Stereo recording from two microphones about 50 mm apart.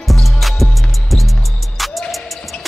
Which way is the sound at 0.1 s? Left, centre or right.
Centre.